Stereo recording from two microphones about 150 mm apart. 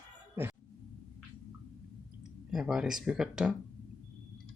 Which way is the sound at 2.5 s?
5° right (ahead or behind).